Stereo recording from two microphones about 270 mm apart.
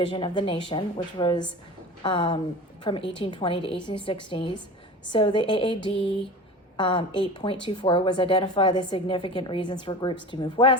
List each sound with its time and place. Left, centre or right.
0.0 s speech: centre